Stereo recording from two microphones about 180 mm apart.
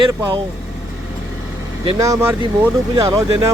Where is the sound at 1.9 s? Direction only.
15° right (ahead or behind).